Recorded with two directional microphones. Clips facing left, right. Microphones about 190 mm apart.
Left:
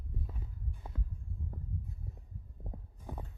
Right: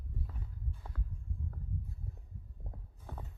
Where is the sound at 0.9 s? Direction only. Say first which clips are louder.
Left 2 dB; 20° left (ahead or behind).